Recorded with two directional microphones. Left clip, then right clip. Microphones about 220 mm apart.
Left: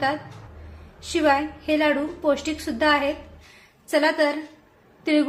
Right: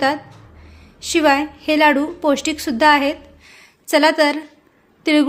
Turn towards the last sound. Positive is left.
turn(degrees=-50)  # may be behind; listen again after turning